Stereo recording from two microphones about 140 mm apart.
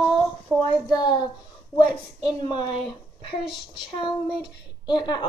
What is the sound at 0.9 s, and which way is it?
Speech, 30° left (ahead or behind).